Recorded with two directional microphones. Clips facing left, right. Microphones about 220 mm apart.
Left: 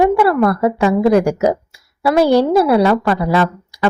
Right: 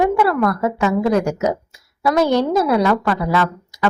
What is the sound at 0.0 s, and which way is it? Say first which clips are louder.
A woman's voice: left 4 dB; 30° left (ahead or behind).